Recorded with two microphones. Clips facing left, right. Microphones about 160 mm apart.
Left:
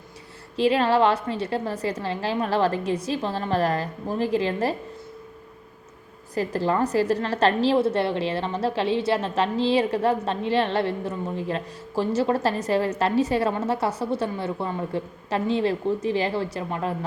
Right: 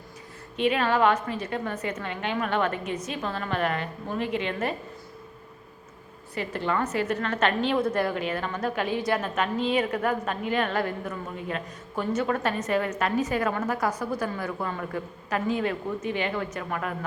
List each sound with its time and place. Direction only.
0.5 s a woman's voice: 30° left (ahead or behind)
6.3 s a woman's voice: 35° left (ahead or behind)